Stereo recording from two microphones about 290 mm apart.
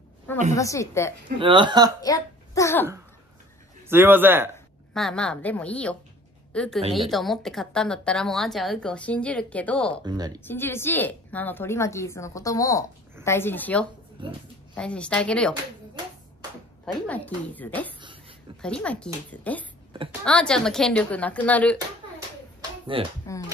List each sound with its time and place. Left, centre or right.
0.6 s a woman's voice: centre
1.4 s a man's voice: centre
2.0 s a child's voice: centre
3.9 s a man's voice: centre
10.0 s a man's voice: centre
10.4 s a woman's voice: centre
17.0 s speech: centre
22.9 s a man's voice: centre